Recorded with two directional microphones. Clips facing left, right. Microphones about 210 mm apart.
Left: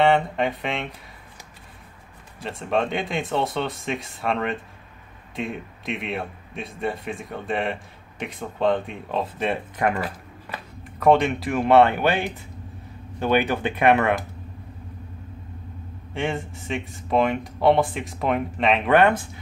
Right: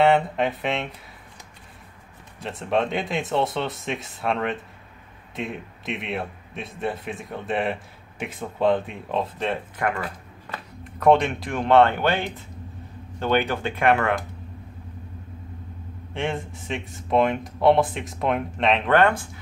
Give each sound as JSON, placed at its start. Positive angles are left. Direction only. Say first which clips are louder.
{"t": 0.0, "sound": "speech", "louder": "even", "side_deg": 0}
{"t": 2.4, "sound": "speech", "louder": "even", "side_deg": 0}
{"t": 9.5, "sound": "speech", "louder": "left 2 dB", "side_deg": 20}
{"t": 10.8, "sound": "speech", "louder": "even", "side_deg": 0}
{"t": 16.1, "sound": "speech", "louder": "left 1 dB", "side_deg": 0}
{"t": 18.9, "sound": "speech", "louder": "left 2 dB", "side_deg": 15}